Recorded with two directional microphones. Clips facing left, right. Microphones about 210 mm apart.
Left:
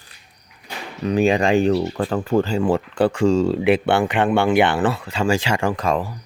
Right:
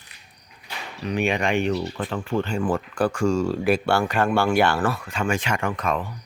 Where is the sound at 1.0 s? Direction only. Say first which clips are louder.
Left 6 dB; 35° left (ahead or behind).